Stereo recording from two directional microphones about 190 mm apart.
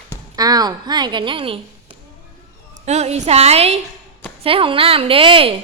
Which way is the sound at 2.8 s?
35° right (ahead or behind).